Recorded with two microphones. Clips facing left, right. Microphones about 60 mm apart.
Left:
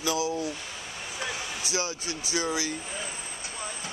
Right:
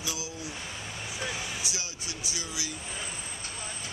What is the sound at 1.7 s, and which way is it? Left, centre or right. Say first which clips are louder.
Speech: left 8 dB; left.